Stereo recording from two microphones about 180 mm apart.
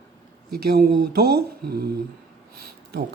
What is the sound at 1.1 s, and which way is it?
Speech, 60° right (ahead or behind).